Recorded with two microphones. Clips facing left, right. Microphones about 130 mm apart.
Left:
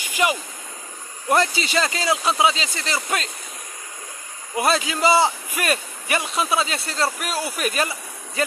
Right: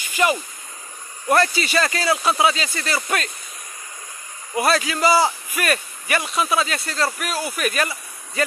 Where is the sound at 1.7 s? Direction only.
20° left (ahead or behind).